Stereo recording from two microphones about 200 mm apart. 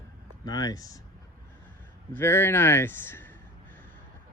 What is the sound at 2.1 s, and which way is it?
Speech, 10° left (ahead or behind).